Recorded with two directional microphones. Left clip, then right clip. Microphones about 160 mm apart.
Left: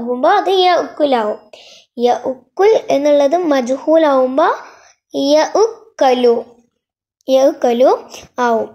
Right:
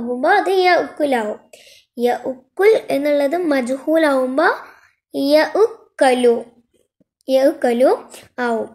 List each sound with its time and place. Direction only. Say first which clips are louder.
0.1 s a child's voice: left 3 dB; 20° left (ahead or behind)
4.6 s a sound: left 4 dB; 20° right (ahead or behind)
5.5 s a woman's voice: left 2 dB; 5° right (ahead or behind)
6.0 s a child's voice: left 2 dB; 20° left (ahead or behind)